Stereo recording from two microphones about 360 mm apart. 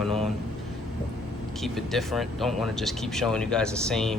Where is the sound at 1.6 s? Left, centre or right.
Centre.